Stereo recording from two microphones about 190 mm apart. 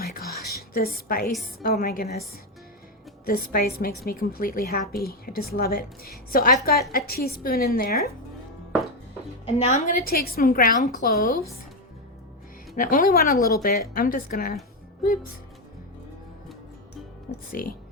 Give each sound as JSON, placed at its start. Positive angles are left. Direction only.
{"t": 0.0, "sound": "whispering", "side_deg": 55}
{"t": 0.7, "sound": "a woman's voice", "side_deg": 50}
{"t": 3.2, "sound": "a woman's voice", "side_deg": 50}
{"t": 9.5, "sound": "a woman's voice", "side_deg": 40}
{"t": 12.7, "sound": "a woman's voice", "side_deg": 45}
{"t": 17.3, "sound": "music", "side_deg": 45}